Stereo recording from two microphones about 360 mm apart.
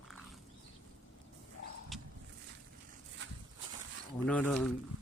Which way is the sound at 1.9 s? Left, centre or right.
Centre.